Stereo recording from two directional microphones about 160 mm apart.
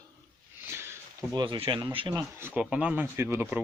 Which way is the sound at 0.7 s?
15° right (ahead or behind).